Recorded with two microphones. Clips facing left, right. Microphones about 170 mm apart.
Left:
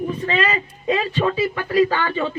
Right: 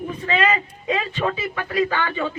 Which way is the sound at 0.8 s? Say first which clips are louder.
Left 3 dB; 35° left (ahead or behind).